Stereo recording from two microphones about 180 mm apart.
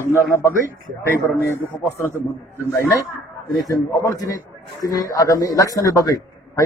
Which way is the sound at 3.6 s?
20° left (ahead or behind).